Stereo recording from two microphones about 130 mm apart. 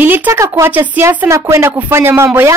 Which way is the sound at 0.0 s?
20° right (ahead or behind).